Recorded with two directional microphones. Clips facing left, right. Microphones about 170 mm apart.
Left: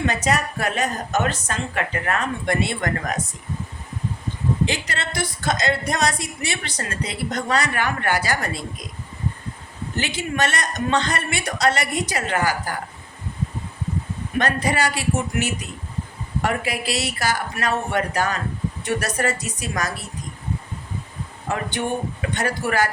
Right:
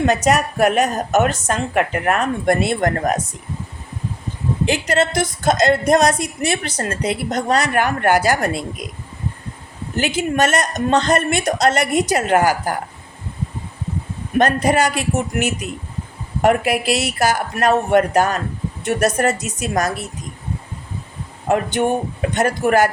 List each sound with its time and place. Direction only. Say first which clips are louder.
0.0 s speech: right 6 dB; 45° right (ahead or behind)
4.9 s speech: right 10 dB; 45° right (ahead or behind)
9.9 s speech: right 7 dB; 45° right (ahead or behind)
14.3 s speech: right 6 dB; 45° right (ahead or behind)
21.4 s speech: right 8 dB; 50° right (ahead or behind)